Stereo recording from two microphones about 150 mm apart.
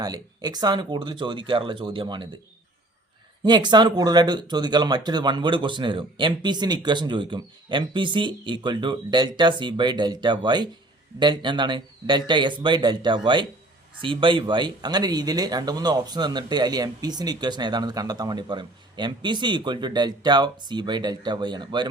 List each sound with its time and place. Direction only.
0.0 s speech: 25° right (ahead or behind)
3.4 s speech: 30° right (ahead or behind)